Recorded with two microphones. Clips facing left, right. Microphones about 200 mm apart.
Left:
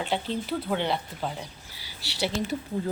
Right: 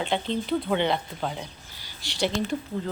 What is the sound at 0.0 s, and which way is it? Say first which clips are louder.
A woman's voice: right 2 dB; 5° left (ahead or behind).